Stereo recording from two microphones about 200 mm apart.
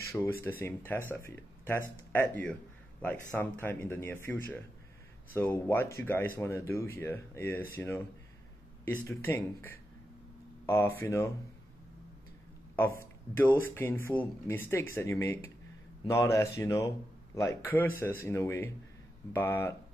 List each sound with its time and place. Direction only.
0.1 s speech: 10° left (ahead or behind)
12.7 s speech: 10° left (ahead or behind)